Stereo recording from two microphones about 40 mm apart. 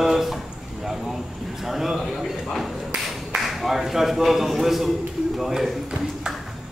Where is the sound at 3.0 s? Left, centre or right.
Centre.